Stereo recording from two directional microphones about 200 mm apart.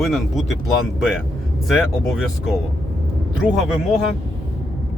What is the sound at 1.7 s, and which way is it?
Speech, centre (ahead or behind).